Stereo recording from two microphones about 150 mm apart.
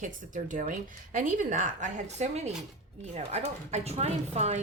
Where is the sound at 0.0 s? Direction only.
60° right (ahead or behind).